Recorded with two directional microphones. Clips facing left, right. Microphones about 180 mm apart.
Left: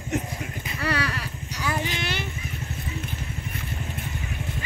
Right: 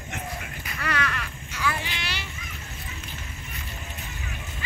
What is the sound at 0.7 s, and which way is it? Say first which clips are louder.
Clip-clop: left 2 dB; 30° left (ahead or behind).